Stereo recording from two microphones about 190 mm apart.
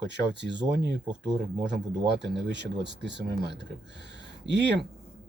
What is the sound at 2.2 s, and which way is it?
Speech, 65° right (ahead or behind).